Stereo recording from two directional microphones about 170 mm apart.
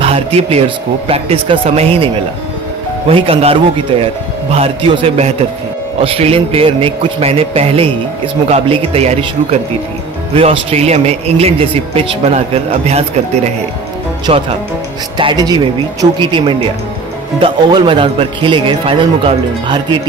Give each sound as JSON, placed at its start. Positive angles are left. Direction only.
{"t": 0.0, "sound": "speech", "side_deg": -35}
{"t": 3.1, "sound": "speech", "side_deg": -35}